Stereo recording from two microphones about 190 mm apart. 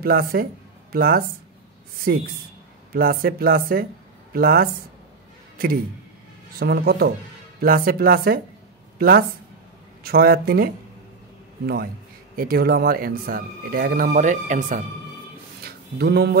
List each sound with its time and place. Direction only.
0.0 s speech: 55° right (ahead or behind)
2.9 s a woman's voice: 50° right (ahead or behind)
15.6 s a sound: 60° right (ahead or behind)